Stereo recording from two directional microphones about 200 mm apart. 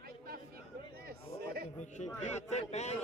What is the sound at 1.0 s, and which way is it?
Chatter, 50° right (ahead or behind).